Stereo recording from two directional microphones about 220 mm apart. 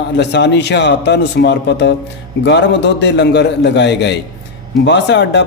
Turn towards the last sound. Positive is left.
turn(degrees=55)  # may be behind; listen again after turning